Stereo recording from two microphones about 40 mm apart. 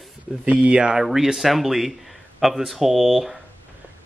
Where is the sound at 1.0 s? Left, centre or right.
Centre.